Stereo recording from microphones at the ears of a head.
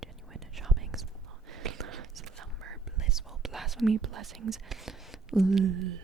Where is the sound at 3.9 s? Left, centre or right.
Right.